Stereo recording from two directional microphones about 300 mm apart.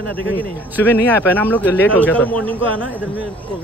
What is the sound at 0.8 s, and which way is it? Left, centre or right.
Speech, centre.